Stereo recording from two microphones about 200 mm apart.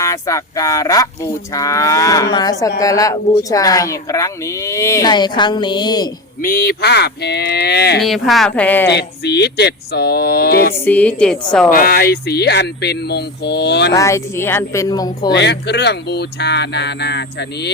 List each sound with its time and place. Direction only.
0.0 s speech: 15° left (ahead or behind)
6.4 s speech: 50° left (ahead or behind)
8.0 s a woman's voice: centre (ahead or behind)
8.9 s speech: 60° left (ahead or behind)
10.8 s speech: 10° left (ahead or behind)
11.7 s speech: 45° left (ahead or behind)
13.9 s speech: 15° left (ahead or behind)
15.3 s speech: 60° left (ahead or behind)